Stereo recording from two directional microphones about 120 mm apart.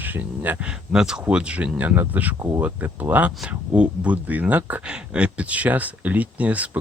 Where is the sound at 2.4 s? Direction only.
25° right (ahead or behind).